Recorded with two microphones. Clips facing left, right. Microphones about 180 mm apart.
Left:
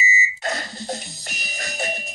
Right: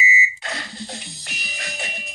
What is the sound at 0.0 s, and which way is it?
Music, 40° left (ahead or behind).